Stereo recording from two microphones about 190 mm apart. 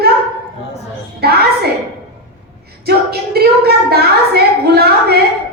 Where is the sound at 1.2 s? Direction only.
55° right (ahead or behind).